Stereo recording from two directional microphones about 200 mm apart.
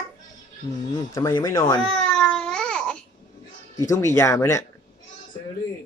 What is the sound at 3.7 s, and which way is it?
Speech, 15° left (ahead or behind).